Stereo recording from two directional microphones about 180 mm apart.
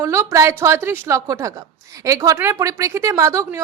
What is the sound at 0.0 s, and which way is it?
A woman's voice, 15° right (ahead or behind).